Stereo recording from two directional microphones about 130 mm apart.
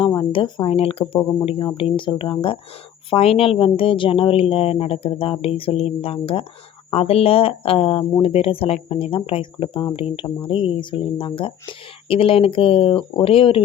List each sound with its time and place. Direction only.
0.2 s speech: 40° left (ahead or behind)